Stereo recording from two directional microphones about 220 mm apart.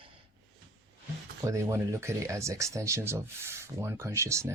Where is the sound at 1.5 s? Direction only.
15° right (ahead or behind).